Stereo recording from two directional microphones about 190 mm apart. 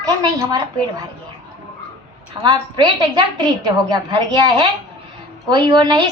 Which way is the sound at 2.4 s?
20° right (ahead or behind).